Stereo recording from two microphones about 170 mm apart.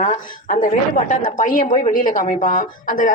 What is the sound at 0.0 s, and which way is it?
A woman's voice, 50° left (ahead or behind).